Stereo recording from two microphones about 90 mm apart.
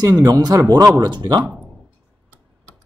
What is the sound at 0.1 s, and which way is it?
Speech, 50° right (ahead or behind).